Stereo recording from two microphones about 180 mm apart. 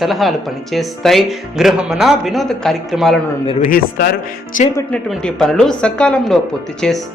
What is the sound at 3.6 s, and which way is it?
Speech, 50° left (ahead or behind).